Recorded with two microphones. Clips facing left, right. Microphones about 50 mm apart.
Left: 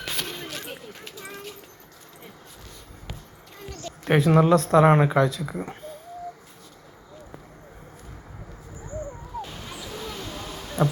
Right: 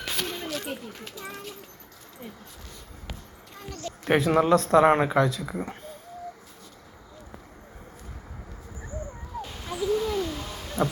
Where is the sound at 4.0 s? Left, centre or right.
Centre.